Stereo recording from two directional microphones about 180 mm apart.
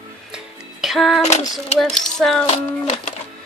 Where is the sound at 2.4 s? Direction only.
40° left (ahead or behind).